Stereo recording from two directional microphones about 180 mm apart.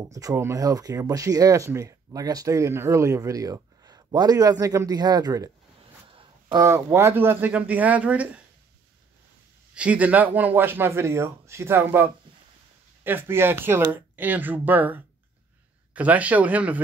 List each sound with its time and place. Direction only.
0.1 s speech: 20° right (ahead or behind)
9.8 s speech: 10° right (ahead or behind)